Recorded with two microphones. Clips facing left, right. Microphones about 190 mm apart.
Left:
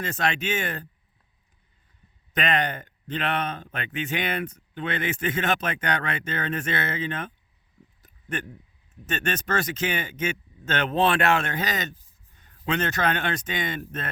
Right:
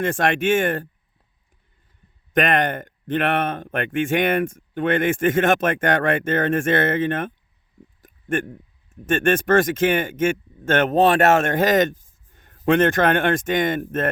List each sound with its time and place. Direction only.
0.0 s speech: 50° right (ahead or behind)
2.3 s speech: 50° right (ahead or behind)